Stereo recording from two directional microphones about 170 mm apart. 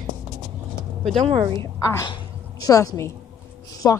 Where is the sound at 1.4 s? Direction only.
30° right (ahead or behind).